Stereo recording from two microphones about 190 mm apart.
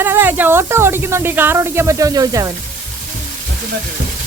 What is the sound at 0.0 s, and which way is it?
Speech, 10° right (ahead or behind).